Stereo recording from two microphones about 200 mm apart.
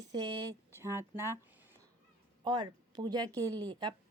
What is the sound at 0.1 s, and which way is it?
Speech, 20° right (ahead or behind).